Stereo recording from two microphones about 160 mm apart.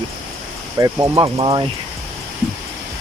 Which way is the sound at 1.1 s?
35° right (ahead or behind).